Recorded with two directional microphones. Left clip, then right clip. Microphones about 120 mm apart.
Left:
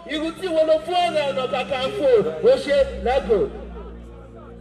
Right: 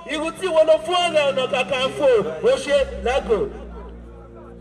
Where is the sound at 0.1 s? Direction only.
40° right (ahead or behind).